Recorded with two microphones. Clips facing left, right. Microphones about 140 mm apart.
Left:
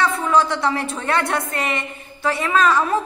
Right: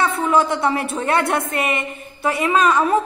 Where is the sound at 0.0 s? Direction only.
25° right (ahead or behind).